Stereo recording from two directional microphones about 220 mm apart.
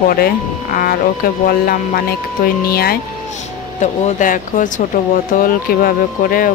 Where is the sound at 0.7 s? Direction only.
40° left (ahead or behind).